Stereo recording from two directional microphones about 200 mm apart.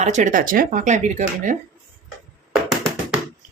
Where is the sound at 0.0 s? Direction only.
40° right (ahead or behind).